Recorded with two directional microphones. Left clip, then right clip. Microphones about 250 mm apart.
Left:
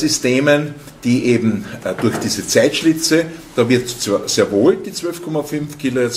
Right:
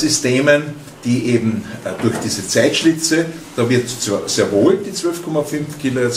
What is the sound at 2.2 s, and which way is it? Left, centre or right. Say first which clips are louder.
Speech: left 2 dB; left.